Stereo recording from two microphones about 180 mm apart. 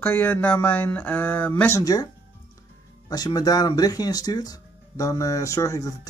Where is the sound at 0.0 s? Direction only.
10° left (ahead or behind).